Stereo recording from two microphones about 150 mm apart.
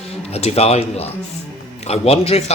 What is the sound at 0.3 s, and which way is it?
Speech, 45° left (ahead or behind).